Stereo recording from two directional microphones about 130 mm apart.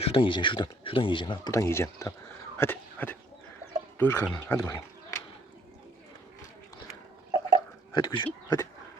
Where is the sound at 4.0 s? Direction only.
15° left (ahead or behind).